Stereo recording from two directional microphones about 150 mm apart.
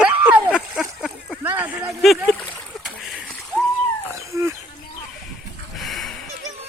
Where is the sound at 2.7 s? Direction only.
5° right (ahead or behind).